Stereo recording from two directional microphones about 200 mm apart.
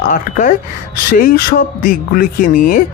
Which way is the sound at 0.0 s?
40° left (ahead or behind).